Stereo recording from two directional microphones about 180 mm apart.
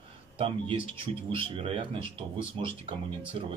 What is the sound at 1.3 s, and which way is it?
Speech, 30° right (ahead or behind).